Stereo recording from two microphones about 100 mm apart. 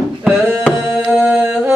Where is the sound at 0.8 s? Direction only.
5° right (ahead or behind).